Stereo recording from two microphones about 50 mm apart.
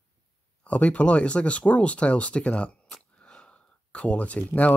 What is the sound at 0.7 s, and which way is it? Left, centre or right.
Speech, left.